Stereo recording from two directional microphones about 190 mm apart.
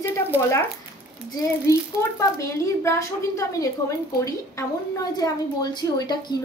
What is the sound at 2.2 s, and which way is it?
A woman's voice, 15° left (ahead or behind).